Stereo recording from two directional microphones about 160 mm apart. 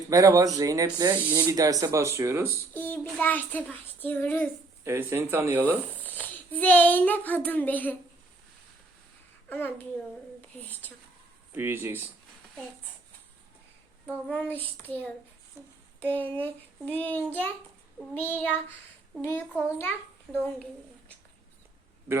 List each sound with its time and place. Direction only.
0.1 s speech: 20° right (ahead or behind)
2.7 s child singing: 10° left (ahead or behind)
4.8 s speech: 15° right (ahead or behind)
5.6 s a child's voice: 10° left (ahead or behind)
9.5 s child singing: 10° left (ahead or behind)
11.5 s speech: 15° right (ahead or behind)
14.1 s child singing: 10° left (ahead or behind)
20.3 s speech: 5° left (ahead or behind)